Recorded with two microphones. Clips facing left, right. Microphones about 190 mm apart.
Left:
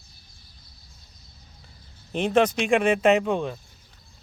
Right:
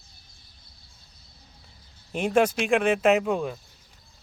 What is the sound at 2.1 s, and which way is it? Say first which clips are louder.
Speech: left 1 dB; 10° right (ahead or behind).